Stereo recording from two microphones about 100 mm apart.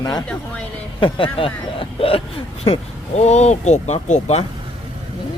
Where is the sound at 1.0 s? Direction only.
60° left (ahead or behind).